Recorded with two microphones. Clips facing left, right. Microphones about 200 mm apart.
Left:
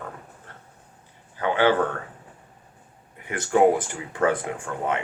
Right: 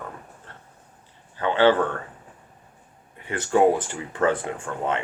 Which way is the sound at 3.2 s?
15° left (ahead or behind).